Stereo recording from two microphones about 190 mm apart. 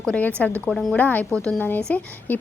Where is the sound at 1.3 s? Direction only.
15° right (ahead or behind).